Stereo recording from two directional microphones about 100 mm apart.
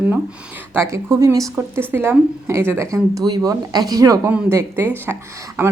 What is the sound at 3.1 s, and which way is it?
Speech, 40° right (ahead or behind).